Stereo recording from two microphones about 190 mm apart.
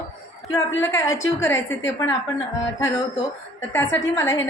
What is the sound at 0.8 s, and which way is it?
Speech, 15° left (ahead or behind).